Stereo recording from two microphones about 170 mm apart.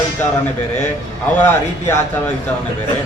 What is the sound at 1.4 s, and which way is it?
Speech, 15° left (ahead or behind).